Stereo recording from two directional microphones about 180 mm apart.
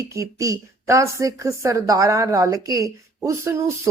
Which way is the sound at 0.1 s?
15° right (ahead or behind).